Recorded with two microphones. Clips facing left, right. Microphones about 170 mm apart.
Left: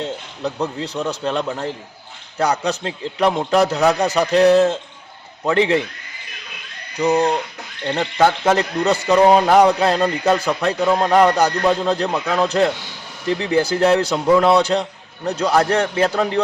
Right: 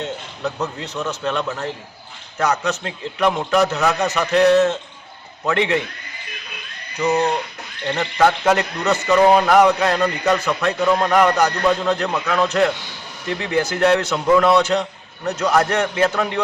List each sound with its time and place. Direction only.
0.0 s a man's voice: 30° left (ahead or behind)
7.9 s a man's voice: 25° left (ahead or behind)
9.1 s speech: 15° left (ahead or behind)
9.5 s a man's voice: 30° left (ahead or behind)
10.8 s a man's voice: 15° left (ahead or behind)
12.0 s speech: 15° left (ahead or behind)
12.3 s a man's voice: 30° left (ahead or behind)